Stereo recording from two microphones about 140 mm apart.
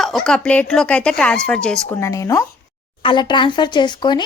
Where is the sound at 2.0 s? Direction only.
25° left (ahead or behind).